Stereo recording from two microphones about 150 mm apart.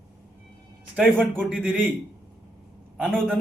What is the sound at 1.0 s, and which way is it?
Speech, 5° right (ahead or behind).